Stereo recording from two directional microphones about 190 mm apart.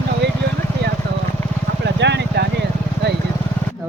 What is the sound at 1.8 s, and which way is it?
Vehicle, 65° right (ahead or behind).